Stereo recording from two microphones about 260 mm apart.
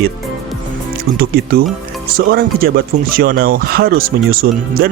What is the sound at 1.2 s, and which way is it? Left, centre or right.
Speech, right.